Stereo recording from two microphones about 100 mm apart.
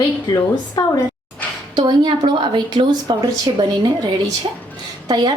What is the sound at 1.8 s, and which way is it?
A woman's voice, 50° right (ahead or behind).